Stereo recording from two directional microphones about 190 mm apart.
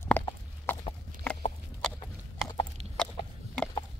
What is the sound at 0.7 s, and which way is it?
Horse, 10° left (ahead or behind).